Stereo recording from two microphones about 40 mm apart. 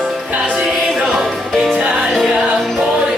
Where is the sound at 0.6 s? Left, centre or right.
Centre.